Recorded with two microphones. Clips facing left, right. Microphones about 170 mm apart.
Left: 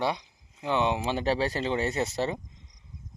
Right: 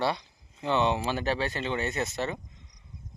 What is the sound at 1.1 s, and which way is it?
Speech, 30° left (ahead or behind).